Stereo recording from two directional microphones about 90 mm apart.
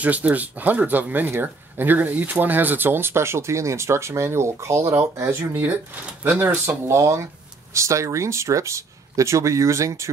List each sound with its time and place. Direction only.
0.0 s speech: 15° right (ahead or behind); by 5.4 s 35° right (ahead or behind)
5.4 s speech: 20° right (ahead or behind)
6.9 s speech: 30° right (ahead or behind)